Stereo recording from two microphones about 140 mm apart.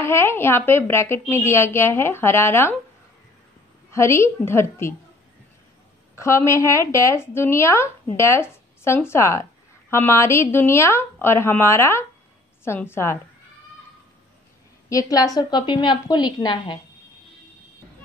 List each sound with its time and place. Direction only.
0.0 s a woman's voice: 20° left (ahead or behind)
3.9 s speech: 20° left (ahead or behind)
6.1 s a woman's voice: 20° left (ahead or behind)
14.9 s a woman's voice: 25° left (ahead or behind)